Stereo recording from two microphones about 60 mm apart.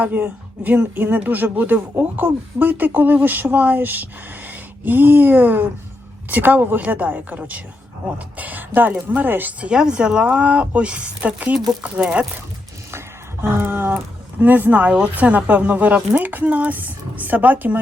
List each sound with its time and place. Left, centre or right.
0.0 s speech: right
13.4 s a sound: right
13.9 s speech: right